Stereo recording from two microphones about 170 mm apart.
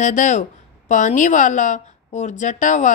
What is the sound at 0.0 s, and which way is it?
Speech, 45° left (ahead or behind).